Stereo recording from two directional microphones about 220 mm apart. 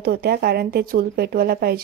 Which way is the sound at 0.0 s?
45° right (ahead or behind).